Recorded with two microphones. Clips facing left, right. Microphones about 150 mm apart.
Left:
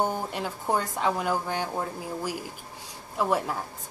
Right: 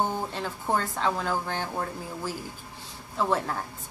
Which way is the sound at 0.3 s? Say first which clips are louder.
Left 1 dB; 15° left (ahead or behind).